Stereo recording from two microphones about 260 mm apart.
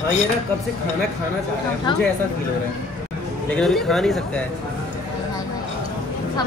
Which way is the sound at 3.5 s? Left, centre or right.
Centre.